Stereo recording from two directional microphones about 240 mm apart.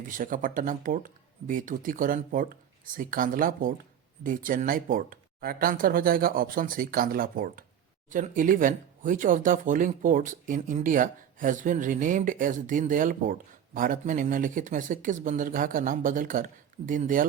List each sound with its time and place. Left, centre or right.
0.1 s speech: right